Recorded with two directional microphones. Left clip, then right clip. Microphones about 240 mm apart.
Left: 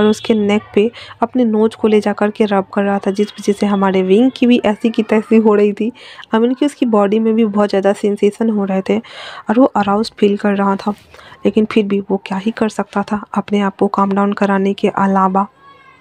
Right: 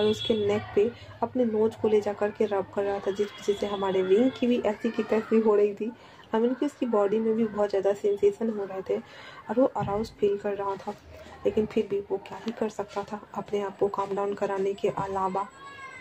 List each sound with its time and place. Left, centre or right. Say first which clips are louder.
0.0 s speech: left 11 dB; left